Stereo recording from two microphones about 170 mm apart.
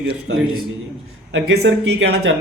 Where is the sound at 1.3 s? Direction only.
90° right.